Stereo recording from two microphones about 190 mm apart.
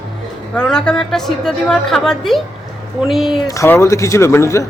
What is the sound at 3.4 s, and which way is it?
Speech, 15° left (ahead or behind).